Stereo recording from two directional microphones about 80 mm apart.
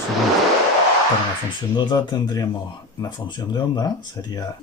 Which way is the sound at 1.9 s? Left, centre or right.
Left.